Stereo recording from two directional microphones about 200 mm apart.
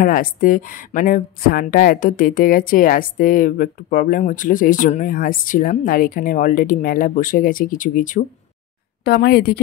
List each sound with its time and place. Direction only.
0.0 s a woman's voice: 45° left (ahead or behind)
9.0 s a woman's voice: 50° left (ahead or behind)